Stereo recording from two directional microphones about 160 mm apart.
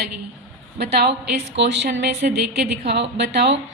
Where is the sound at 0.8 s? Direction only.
90° right.